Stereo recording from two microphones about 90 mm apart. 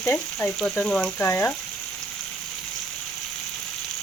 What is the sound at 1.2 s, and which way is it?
Frying, 20° left (ahead or behind).